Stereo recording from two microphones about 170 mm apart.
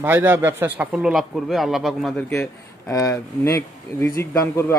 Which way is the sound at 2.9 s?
20° left (ahead or behind).